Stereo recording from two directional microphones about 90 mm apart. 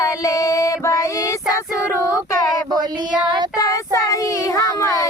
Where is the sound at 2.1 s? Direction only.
40° left (ahead or behind).